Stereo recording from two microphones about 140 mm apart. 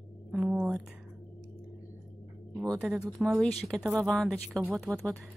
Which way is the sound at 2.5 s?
25° right (ahead or behind).